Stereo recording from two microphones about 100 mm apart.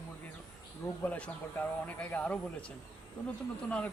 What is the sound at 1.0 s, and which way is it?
A man's voice, 15° left (ahead or behind).